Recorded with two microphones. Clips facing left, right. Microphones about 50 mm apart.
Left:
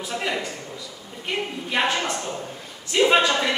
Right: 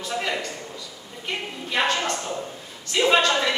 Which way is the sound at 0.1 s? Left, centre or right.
Centre.